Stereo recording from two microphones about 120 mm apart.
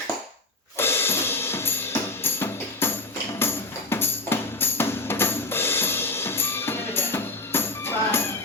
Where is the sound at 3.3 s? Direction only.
20° left (ahead or behind).